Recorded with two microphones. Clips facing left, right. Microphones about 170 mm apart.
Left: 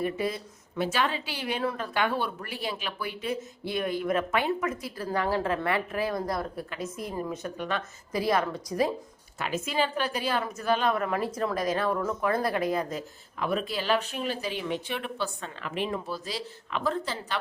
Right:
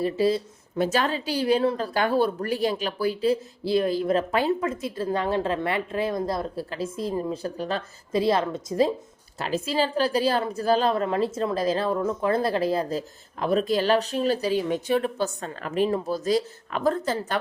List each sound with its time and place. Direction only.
0.0 s speech: 30° right (ahead or behind)
0.8 s speech: 40° right (ahead or behind)